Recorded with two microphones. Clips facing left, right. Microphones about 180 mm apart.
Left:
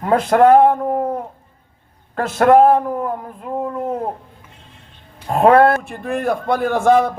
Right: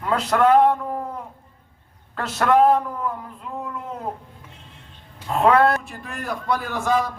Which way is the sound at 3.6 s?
50° left (ahead or behind).